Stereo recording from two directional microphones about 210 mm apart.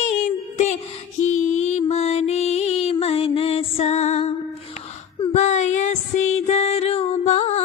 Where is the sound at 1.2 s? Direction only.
35° left (ahead or behind).